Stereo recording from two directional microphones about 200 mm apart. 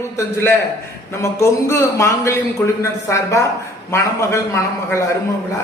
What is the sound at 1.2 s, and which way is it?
A man's voice, 15° left (ahead or behind).